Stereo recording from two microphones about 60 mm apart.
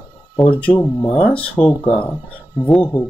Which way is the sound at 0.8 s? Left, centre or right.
Left.